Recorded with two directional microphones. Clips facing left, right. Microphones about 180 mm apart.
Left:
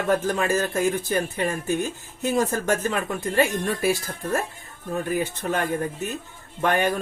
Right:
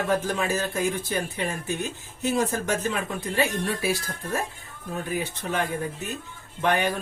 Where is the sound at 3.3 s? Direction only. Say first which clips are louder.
Left 3 dB; 50° left (ahead or behind).